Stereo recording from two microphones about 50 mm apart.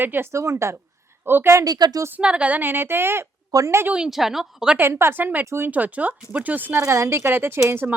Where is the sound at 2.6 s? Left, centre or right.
Right.